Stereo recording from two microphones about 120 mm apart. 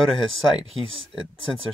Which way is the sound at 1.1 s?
40° left (ahead or behind).